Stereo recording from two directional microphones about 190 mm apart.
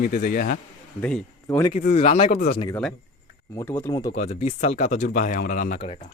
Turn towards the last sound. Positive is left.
turn(degrees=45)  # may be behind; listen again after turning